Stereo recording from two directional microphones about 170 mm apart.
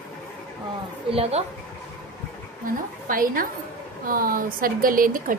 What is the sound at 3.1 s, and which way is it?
A woman's voice, 55° right (ahead or behind).